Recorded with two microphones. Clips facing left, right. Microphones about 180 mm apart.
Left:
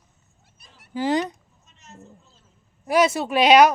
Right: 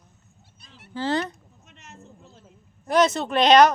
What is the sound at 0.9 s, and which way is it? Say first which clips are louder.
Speech: left 3 dB; 15° left (ahead or behind).